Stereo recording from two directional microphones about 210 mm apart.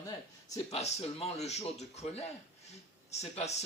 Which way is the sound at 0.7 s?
30° left (ahead or behind).